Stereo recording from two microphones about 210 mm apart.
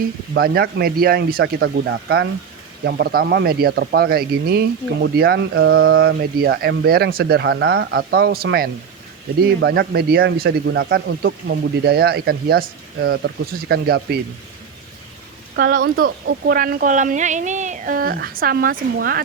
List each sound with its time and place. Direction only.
0.3 s speech: 45° right (ahead or behind); by 6.1 s 70° right (ahead or behind)
6.6 s speech: 50° right (ahead or behind)
15.5 s speech: 40° right (ahead or behind)